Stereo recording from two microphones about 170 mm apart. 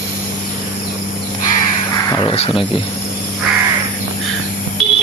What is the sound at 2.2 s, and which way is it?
Speech, 35° left (ahead or behind).